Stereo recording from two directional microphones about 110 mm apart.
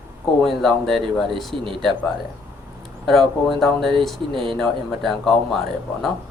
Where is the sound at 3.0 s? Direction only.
Centre (ahead or behind).